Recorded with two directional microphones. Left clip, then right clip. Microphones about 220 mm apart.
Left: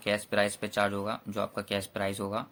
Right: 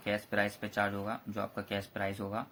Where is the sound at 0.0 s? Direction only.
40° left (ahead or behind).